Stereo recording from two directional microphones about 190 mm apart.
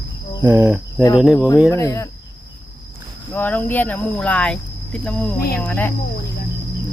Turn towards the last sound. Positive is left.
turn(degrees=10)  # may be behind; listen again after turning